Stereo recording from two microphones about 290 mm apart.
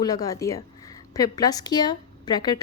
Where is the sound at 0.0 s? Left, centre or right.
Centre.